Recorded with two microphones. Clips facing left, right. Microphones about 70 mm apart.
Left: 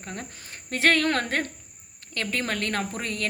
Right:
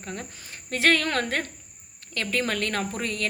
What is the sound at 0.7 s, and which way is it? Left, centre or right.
Speech, left.